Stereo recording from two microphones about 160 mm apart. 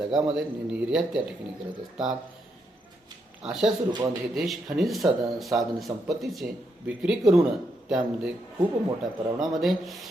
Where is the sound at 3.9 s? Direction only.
25° right (ahead or behind).